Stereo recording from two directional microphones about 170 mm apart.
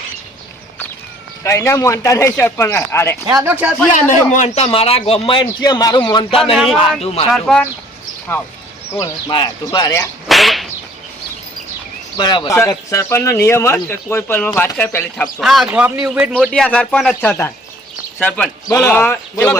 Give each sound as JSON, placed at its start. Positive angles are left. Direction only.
{"t": 1.5, "sound": "speech", "side_deg": 15}
{"t": 3.2, "sound": "speech", "side_deg": -20}
{"t": 3.9, "sound": "speech", "side_deg": 45}
{"t": 6.4, "sound": "speech", "side_deg": 0}
{"t": 8.9, "sound": "speech", "side_deg": 20}
{"t": 10.2, "sound": "whip", "side_deg": 0}
{"t": 12.1, "sound": "speech", "side_deg": 25}
{"t": 15.4, "sound": "speech", "side_deg": 0}
{"t": 16.3, "sound": "speech", "side_deg": 5}